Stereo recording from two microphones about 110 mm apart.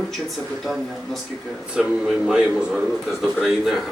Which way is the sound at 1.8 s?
5° right (ahead or behind).